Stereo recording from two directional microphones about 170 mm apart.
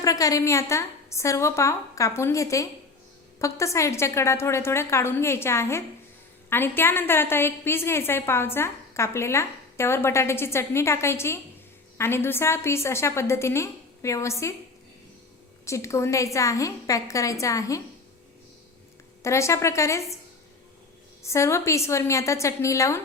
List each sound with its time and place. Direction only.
0.0 s a woman's voice: 20° left (ahead or behind)
15.6 s a woman's voice: 15° left (ahead or behind)
19.2 s a woman's voice: 15° left (ahead or behind)
21.2 s a woman's voice: 15° left (ahead or behind)